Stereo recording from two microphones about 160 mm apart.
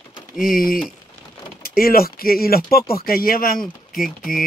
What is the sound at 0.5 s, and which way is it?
Speech, 65° left (ahead or behind).